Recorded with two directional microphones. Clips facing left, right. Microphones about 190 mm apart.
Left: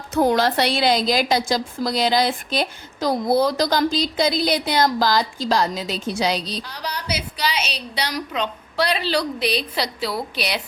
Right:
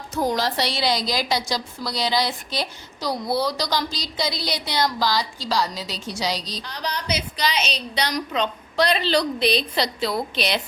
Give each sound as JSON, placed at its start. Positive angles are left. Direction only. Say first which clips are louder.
{"t": 0.1, "sound": "a woman's voice", "louder": "left 5 dB", "side_deg": 60}
{"t": 6.7, "sound": "a woman's voice", "louder": "right 1 dB", "side_deg": 10}